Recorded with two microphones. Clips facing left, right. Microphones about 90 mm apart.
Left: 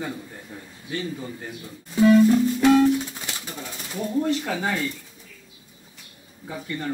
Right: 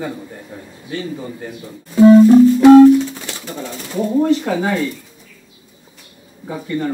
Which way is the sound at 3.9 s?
30° right (ahead or behind).